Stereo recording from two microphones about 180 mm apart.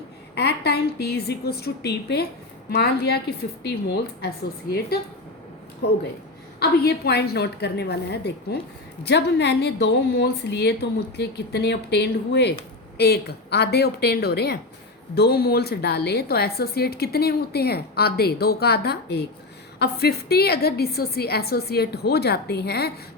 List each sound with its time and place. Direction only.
0.3 s a woman's voice: 65° left (ahead or behind)
5.8 s a woman's voice: 65° left (ahead or behind)